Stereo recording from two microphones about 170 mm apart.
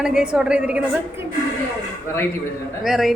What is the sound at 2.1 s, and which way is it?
Speech, 15° left (ahead or behind).